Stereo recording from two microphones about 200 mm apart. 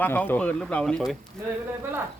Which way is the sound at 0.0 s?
10° left (ahead or behind).